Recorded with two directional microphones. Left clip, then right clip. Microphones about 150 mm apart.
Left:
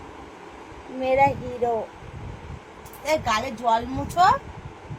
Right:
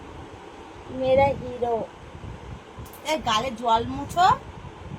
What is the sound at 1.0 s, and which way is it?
Speech, 25° left (ahead or behind).